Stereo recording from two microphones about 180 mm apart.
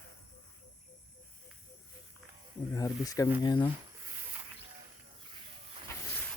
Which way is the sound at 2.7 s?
20° left (ahead or behind).